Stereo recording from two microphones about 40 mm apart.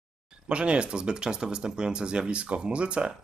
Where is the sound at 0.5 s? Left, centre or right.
Right.